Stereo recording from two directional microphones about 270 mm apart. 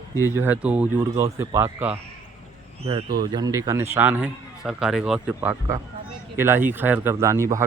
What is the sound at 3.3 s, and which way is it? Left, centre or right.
A man's voice, centre.